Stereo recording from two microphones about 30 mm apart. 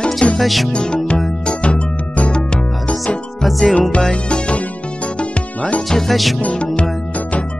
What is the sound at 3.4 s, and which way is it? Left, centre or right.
Music, centre.